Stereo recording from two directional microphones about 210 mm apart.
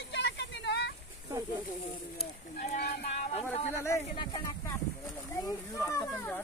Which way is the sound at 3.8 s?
15° left (ahead or behind).